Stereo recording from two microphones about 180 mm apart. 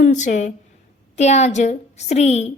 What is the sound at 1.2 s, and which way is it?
Female singing, 40° left (ahead or behind).